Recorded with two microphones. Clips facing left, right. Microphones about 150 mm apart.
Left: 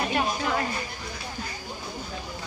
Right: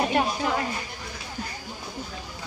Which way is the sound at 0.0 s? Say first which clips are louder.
Right 2 dB; 20° right (ahead or behind).